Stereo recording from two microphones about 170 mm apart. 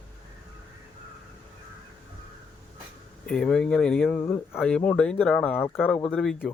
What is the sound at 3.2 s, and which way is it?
Speech, 5° left (ahead or behind).